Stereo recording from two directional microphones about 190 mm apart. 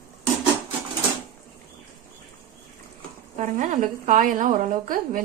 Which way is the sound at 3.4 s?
40° right (ahead or behind).